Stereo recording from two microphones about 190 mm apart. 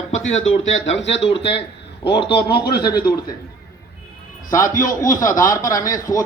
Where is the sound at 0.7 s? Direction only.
85° left.